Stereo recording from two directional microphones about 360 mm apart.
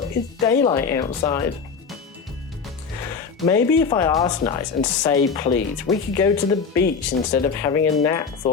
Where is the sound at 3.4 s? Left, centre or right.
Centre.